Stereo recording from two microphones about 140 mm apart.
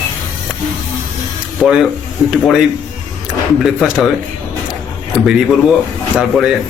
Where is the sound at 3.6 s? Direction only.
Centre (ahead or behind).